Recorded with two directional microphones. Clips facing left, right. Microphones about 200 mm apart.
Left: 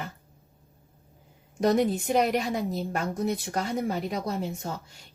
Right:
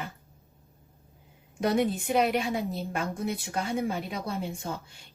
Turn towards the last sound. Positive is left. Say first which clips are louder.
# left 3 dB
turn(degrees=40)  # may be behind; listen again after turning